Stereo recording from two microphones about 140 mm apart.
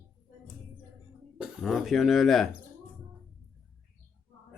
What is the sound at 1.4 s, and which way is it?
Speech, centre (ahead or behind).